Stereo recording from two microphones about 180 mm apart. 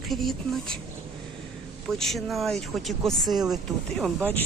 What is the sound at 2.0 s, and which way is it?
Speech, centre (ahead or behind).